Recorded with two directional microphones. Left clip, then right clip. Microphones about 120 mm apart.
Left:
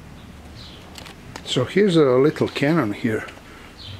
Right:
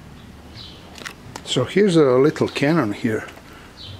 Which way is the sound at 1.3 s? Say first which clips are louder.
Right 1 dB; 5° right (ahead or behind).